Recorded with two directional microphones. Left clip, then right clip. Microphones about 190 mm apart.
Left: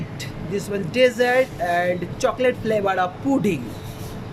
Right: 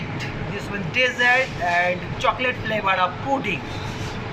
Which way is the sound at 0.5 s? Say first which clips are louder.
Left 2 dB; 60° left (ahead or behind).